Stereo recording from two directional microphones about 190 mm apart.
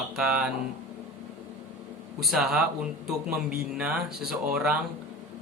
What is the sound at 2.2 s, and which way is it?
Speech, centre (ahead or behind).